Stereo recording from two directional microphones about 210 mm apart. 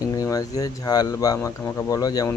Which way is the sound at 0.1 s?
15° left (ahead or behind).